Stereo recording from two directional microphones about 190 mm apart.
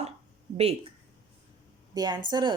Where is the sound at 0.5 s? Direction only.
35° right (ahead or behind).